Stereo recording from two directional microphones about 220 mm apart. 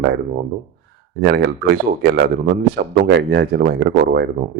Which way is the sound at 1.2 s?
50° right (ahead or behind).